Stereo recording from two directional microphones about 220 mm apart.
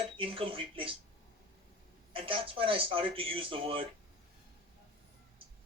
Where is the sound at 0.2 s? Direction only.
25° right (ahead or behind).